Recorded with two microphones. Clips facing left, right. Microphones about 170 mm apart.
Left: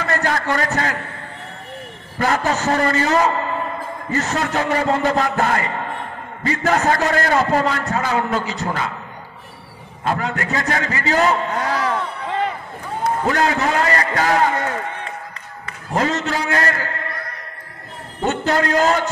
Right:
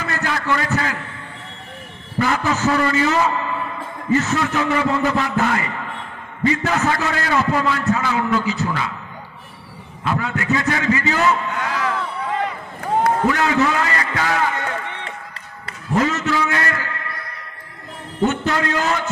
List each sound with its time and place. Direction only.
0.0 s a man's voice: 45° left (ahead or behind)
2.1 s a man's voice: 40° left (ahead or behind)
10.0 s a man's voice: 40° left (ahead or behind)
15.9 s a sound: 40° left (ahead or behind)
18.3 s a man's voice: 35° left (ahead or behind)